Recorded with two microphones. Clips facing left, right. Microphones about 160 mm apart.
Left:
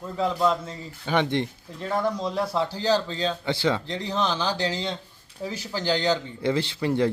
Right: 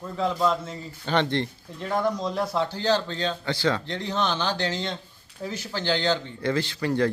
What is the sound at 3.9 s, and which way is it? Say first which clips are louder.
Speech: even; 5° left (ahead or behind).